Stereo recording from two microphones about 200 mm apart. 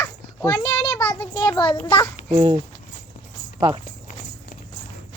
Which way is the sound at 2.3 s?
25° right (ahead or behind).